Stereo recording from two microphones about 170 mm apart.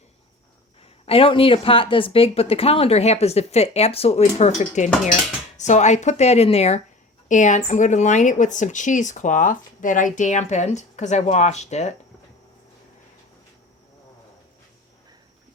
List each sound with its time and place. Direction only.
0.8 s speech: 35° left (ahead or behind)